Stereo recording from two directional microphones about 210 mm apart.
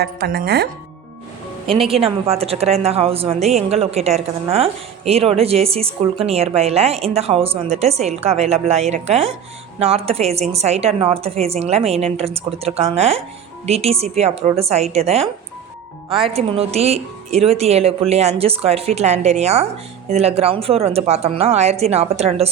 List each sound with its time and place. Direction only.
0.0 s speech: 45° right (ahead or behind)
2.0 s a woman's voice: 30° right (ahead or behind)